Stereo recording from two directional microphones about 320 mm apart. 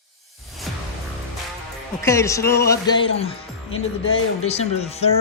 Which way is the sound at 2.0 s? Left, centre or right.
Centre.